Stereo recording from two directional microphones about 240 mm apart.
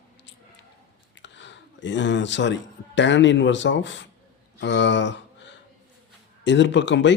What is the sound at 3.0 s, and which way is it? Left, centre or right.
Speech, left.